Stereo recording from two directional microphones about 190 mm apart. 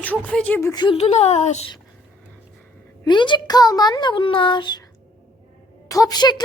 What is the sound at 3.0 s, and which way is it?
A child's voice, 25° left (ahead or behind).